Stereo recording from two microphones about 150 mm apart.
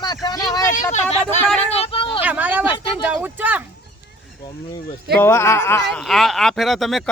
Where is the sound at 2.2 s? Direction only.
10° right (ahead or behind).